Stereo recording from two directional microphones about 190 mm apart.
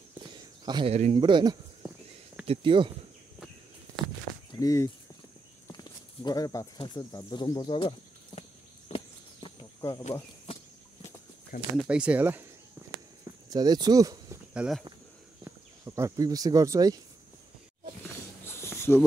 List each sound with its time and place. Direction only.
0.2 s a sound: 25° right (ahead or behind)
2.4 s speech: 30° right (ahead or behind)
4.5 s speech: 15° left (ahead or behind)
8.4 s a sound: 30° left (ahead or behind)
11.7 s speech: 5° right (ahead or behind)
13.5 s speech: 20° right (ahead or behind)
14.5 s speech: 5° right (ahead or behind)
15.8 s speech: 15° right (ahead or behind)
18.0 s a sound: 10° left (ahead or behind)